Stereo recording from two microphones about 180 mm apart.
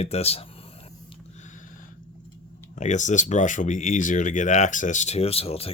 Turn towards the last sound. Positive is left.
turn(degrees=35)  # may be behind; listen again after turning